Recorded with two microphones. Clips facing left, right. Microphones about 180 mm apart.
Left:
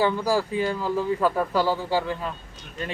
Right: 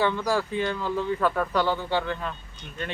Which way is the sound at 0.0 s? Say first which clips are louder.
Left 2 dB; 10° left (ahead or behind).